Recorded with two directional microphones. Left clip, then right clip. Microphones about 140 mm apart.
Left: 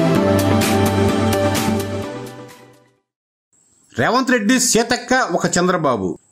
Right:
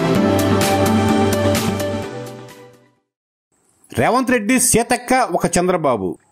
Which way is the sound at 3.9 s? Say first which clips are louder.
Even; 30° right (ahead or behind).